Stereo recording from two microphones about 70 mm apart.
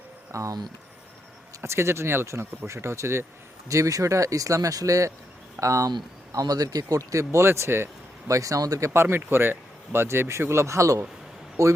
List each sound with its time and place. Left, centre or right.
0.3 s speech: right
1.6 s speech: right
3.7 s speech: right
6.4 s speech: right
8.3 s speech: right
8.9 s speech: right